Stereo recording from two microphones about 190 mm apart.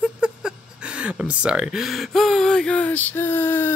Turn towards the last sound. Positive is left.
turn(degrees=10)  # may be behind; listen again after turning